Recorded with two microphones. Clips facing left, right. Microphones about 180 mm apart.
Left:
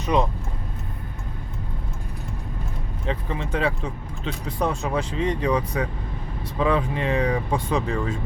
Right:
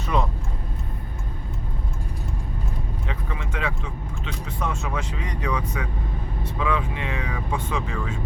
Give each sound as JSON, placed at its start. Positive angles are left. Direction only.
{"t": 0.0, "sound": "speech", "side_deg": 20}
{"t": 3.1, "sound": "speech", "side_deg": 30}